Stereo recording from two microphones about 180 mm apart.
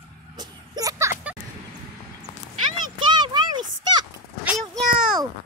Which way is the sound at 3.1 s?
25° right (ahead or behind).